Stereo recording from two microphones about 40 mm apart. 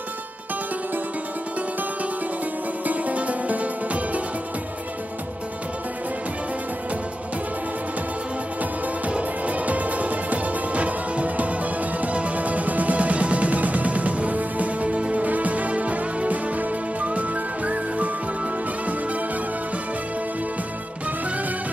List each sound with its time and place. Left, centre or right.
2.8 s music: right
9.0 s music: right